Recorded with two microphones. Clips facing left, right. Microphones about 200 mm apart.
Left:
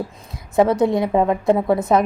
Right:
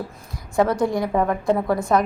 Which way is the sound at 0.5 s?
20° left (ahead or behind).